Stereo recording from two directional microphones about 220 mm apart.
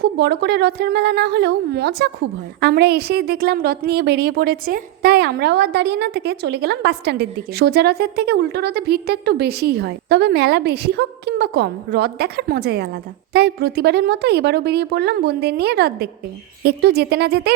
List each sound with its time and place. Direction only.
0.0 s a woman's voice: 50° right (ahead or behind)